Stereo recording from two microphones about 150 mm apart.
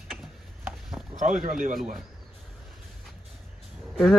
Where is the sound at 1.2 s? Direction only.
60° right (ahead or behind).